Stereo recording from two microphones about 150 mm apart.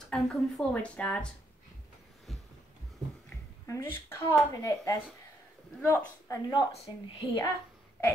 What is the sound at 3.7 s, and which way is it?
Speech, 20° left (ahead or behind).